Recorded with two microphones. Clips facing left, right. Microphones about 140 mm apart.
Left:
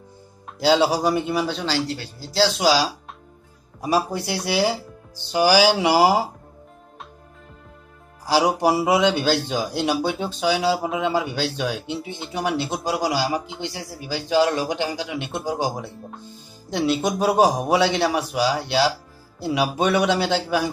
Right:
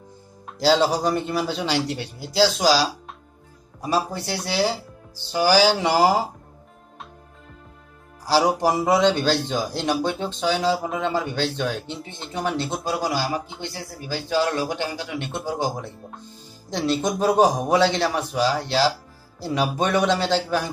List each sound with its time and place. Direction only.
0.6 s a man's voice: 5° left (ahead or behind)
1.7 s speech: 20° right (ahead or behind)
2.4 s a man's voice: centre (ahead or behind)
3.8 s speech: 15° left (ahead or behind)
8.3 s a man's voice: 10° left (ahead or behind)